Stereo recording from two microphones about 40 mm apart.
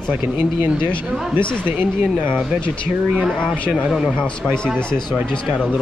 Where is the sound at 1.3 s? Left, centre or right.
Right.